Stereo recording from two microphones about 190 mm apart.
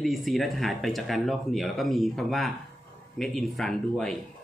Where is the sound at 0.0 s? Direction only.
Centre (ahead or behind).